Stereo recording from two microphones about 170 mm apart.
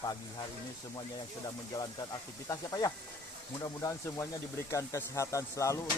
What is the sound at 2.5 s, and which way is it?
Speech, 20° left (ahead or behind).